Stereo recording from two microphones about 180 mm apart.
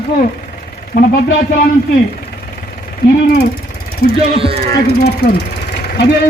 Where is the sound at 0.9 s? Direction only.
55° left (ahead or behind).